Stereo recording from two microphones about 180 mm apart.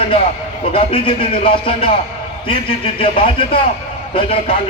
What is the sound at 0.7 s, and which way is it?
A man's voice, 30° left (ahead or behind).